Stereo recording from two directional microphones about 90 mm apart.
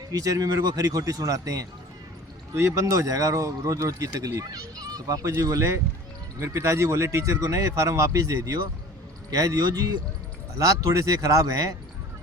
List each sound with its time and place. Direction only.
0.1 s speech: 45° right (ahead or behind)